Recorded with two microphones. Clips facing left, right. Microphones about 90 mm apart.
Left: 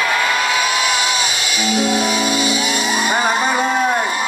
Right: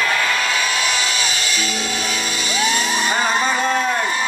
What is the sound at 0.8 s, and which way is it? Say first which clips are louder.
Music: left 3 dB; 10° left (ahead or behind).